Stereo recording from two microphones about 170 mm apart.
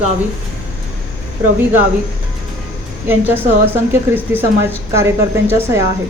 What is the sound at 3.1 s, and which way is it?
A woman's voice, 10° right (ahead or behind).